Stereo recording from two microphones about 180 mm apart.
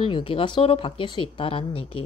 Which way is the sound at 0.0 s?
30° left (ahead or behind).